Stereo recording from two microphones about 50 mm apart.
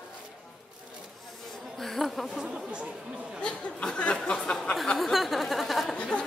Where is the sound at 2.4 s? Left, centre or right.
Centre.